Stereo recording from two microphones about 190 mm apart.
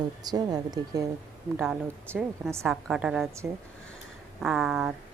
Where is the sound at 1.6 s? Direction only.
5° right (ahead or behind).